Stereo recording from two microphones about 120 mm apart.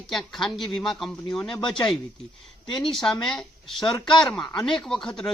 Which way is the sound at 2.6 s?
40° left (ahead or behind).